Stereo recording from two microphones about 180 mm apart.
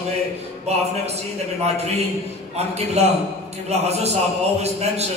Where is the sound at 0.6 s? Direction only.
35° right (ahead or behind).